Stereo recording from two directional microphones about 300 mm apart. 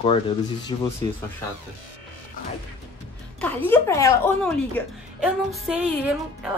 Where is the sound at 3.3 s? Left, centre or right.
Centre.